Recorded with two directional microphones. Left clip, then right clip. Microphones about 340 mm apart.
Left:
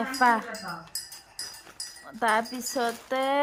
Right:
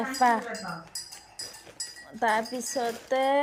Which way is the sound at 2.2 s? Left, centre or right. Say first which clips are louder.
Left 1 dB; centre.